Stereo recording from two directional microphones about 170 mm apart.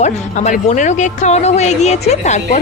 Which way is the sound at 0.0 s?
40° left (ahead or behind).